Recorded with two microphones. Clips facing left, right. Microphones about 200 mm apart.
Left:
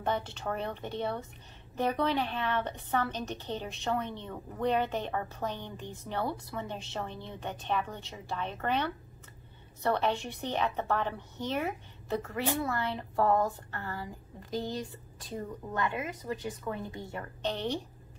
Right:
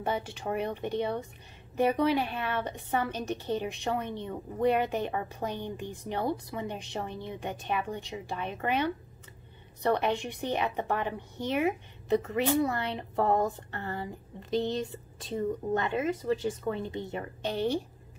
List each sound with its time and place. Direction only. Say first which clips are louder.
0.0 s a woman's voice: right 1 dB; 10° right (ahead or behind)
17.4 s a woman's voice: right 3 dB; 10° right (ahead or behind)